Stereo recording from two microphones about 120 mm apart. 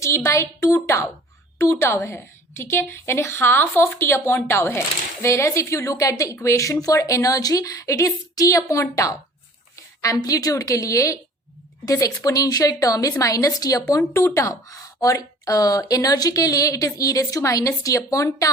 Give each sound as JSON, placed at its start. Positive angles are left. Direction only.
{"t": 0.0, "sound": "speech", "side_deg": 25}